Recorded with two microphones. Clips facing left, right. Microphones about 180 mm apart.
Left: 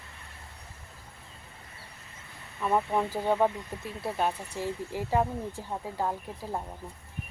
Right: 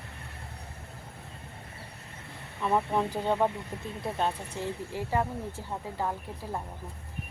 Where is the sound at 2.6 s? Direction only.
5° left (ahead or behind).